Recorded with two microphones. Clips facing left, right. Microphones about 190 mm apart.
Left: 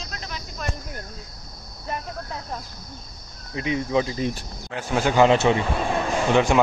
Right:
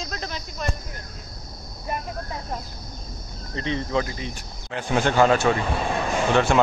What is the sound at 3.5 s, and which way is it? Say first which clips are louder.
Speech: left 2 dB; 10° left (ahead or behind).